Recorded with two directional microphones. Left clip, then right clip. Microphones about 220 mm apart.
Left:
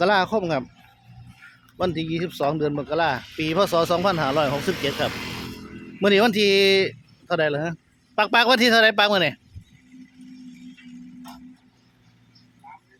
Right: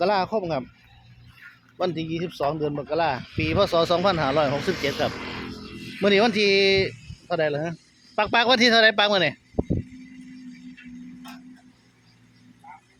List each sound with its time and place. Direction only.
0.0 s speech: 15° left (ahead or behind)
1.8 s speech: 10° left (ahead or behind)
4.7 s speech: 40° left (ahead or behind)
5.0 s music: 20° left (ahead or behind)
6.0 s speech: 10° left (ahead or behind)